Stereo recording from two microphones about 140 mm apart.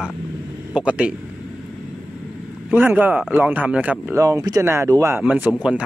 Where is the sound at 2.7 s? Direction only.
15° right (ahead or behind).